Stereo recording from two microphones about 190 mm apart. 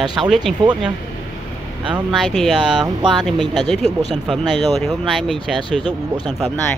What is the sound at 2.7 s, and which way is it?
Speech, 25° right (ahead or behind).